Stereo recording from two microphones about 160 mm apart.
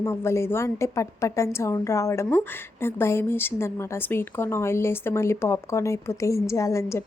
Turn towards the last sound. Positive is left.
turn(degrees=15)  # may be behind; listen again after turning